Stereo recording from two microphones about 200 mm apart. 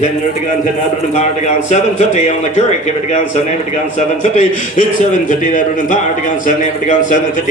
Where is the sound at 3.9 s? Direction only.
35° left (ahead or behind).